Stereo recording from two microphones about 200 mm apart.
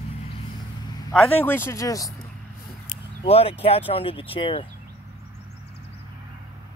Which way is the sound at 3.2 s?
30° left (ahead or behind).